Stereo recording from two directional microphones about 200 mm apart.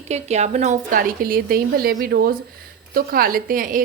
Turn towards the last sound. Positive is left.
turn(degrees=-45)  # may be behind; listen again after turning